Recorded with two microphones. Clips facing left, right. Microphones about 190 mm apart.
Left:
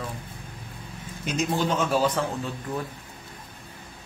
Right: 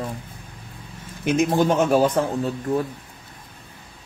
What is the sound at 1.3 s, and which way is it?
A man's voice, 55° right (ahead or behind).